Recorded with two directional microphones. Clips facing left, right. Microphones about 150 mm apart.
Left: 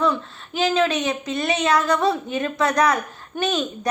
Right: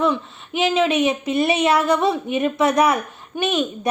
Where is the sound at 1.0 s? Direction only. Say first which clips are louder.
Right 5 dB; 25° right (ahead or behind).